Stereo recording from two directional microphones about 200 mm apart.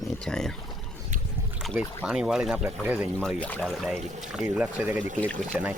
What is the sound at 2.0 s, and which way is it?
Speech, 5° right (ahead or behind).